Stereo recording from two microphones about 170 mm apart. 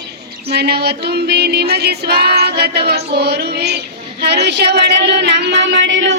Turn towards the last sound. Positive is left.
turn(degrees=-90)